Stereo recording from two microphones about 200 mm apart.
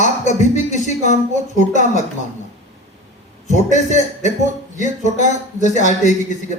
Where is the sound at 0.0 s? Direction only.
35° left (ahead or behind).